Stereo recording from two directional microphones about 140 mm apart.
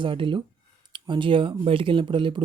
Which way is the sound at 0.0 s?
35° right (ahead or behind).